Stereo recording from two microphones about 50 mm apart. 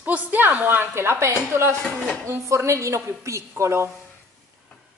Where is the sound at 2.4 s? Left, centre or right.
Right.